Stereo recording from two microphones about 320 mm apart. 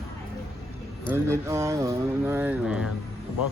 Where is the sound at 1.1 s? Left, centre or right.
Centre.